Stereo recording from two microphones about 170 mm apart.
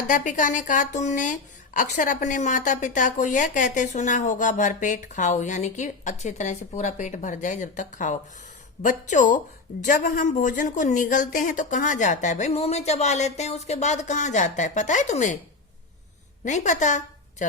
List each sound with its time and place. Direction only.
0.1 s a woman's voice: 50° left (ahead or behind)
16.4 s a woman's voice: 45° left (ahead or behind)